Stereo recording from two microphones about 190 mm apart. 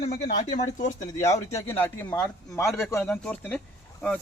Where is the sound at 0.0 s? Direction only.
40° left (ahead or behind).